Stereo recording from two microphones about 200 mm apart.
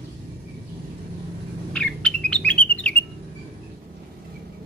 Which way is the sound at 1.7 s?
5° left (ahead or behind).